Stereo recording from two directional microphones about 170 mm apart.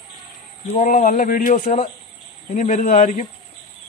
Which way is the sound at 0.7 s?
45° left (ahead or behind).